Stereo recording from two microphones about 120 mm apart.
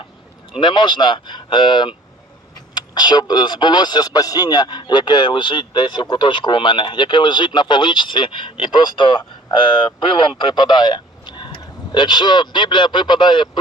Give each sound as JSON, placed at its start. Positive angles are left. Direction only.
{"t": 0.6, "sound": "speech", "side_deg": 40}